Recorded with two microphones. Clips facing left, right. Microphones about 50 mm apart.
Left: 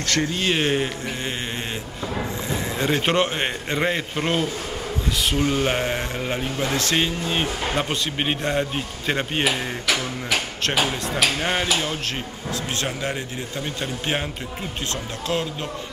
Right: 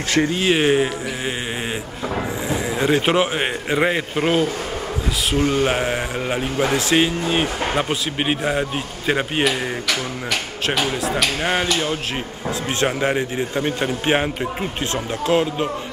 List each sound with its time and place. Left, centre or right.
0.1 s a man's voice: centre
2.8 s a man's voice: centre
11.4 s a man's voice: centre
12.4 s a man's voice: right